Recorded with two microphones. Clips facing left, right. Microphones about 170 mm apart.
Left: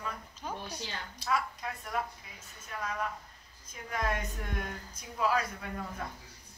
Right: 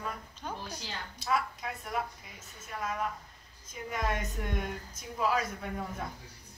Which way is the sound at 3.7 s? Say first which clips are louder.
Even; centre (ahead or behind).